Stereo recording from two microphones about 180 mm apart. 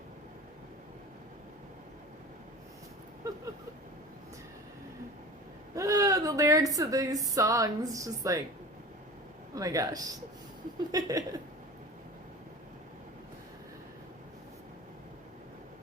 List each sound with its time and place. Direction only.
5.7 s a woman's voice: 20° right (ahead or behind)
9.6 s a man's voice: 20° right (ahead or behind)